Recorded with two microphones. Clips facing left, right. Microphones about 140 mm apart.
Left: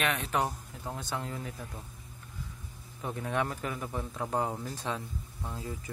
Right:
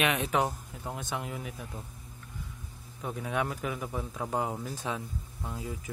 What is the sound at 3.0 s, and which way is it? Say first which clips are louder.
Speech: even; centre (ahead or behind).